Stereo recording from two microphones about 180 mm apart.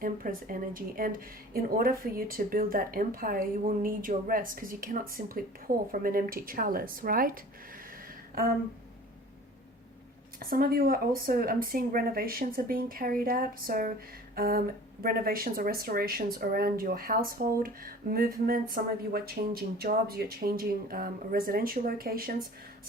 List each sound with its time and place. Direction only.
0.0 s speech: 50° right (ahead or behind)
10.4 s speech: 55° right (ahead or behind)